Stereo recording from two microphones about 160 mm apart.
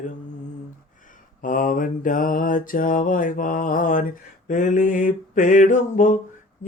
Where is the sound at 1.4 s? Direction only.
60° left (ahead or behind).